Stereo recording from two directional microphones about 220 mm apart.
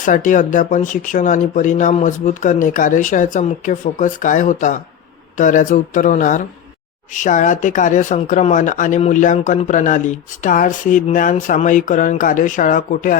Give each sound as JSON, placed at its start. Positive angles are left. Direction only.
{"t": 0.0, "sound": "speech", "side_deg": 35}